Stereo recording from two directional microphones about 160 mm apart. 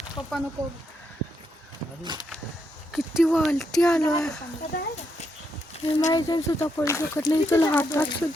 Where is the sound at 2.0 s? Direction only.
30° right (ahead or behind).